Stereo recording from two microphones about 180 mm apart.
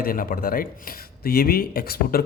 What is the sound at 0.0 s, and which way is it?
A man's voice, 55° left (ahead or behind).